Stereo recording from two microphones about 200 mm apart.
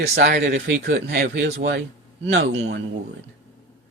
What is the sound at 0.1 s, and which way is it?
Speech, 60° right (ahead or behind).